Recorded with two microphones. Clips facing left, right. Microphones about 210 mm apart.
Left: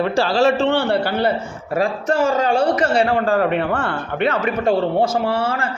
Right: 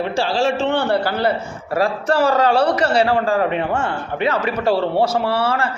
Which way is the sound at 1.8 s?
35° right (ahead or behind).